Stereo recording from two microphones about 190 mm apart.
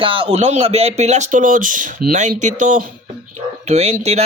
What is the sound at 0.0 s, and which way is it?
Speech, 30° right (ahead or behind).